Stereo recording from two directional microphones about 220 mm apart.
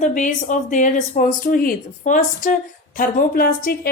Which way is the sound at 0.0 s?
35° left (ahead or behind).